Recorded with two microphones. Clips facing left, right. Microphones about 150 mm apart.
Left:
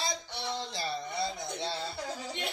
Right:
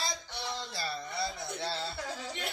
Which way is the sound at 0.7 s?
20° left (ahead or behind).